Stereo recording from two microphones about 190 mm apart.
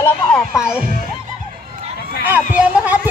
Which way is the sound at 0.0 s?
5° left (ahead or behind).